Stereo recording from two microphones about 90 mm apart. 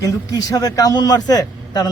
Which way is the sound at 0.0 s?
40° left (ahead or behind).